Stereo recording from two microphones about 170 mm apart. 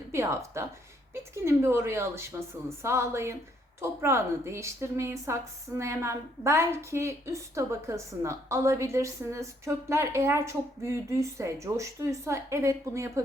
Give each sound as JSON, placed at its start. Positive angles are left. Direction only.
{"t": 0.1, "sound": "a woman's voice", "side_deg": -15}